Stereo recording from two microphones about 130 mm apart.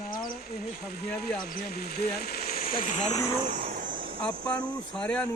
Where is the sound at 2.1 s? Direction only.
90° left; by 3.2 s 65° left (ahead or behind).